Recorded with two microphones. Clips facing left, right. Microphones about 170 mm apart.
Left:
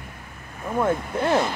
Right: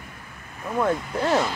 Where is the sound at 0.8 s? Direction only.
20° left (ahead or behind).